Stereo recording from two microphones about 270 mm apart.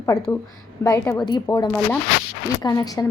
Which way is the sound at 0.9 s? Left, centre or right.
Centre.